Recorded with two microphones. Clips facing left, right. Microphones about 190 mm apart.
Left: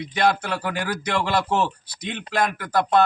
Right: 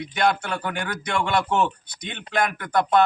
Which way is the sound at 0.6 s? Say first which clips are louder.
Left 2 dB; 5° left (ahead or behind).